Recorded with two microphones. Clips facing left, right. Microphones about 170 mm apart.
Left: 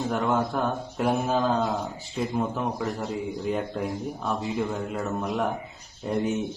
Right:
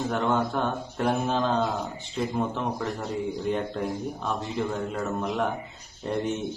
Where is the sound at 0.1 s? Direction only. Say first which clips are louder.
Left 1 dB; 5° left (ahead or behind).